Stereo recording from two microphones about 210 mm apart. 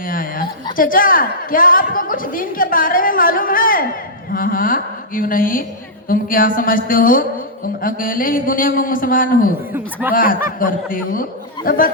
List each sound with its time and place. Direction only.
0.0 s a man's voice: 40° left (ahead or behind)